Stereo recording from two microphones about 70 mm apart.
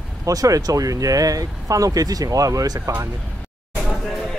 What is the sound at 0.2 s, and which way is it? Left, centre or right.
Speech, right.